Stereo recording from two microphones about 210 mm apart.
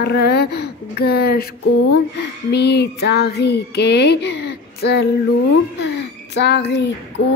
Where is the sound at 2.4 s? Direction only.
50° left (ahead or behind).